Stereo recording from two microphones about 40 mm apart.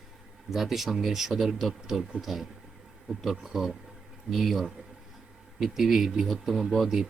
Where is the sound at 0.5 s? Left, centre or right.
Centre.